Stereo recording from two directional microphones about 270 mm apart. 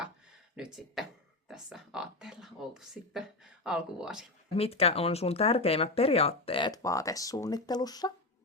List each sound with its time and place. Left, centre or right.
0.5 s speech: centre
4.5 s speech: left